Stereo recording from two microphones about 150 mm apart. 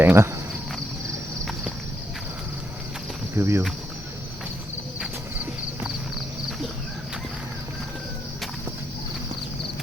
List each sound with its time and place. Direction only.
0.0 s speech: 15° right (ahead or behind)
3.3 s speech: 20° right (ahead or behind)